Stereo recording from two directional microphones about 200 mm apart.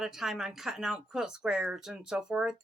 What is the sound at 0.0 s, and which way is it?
Speech, centre (ahead or behind).